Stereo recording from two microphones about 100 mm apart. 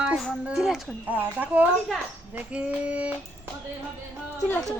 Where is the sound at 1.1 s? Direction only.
15° right (ahead or behind).